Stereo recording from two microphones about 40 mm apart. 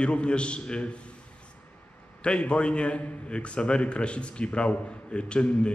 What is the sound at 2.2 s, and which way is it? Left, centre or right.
A man's voice, left.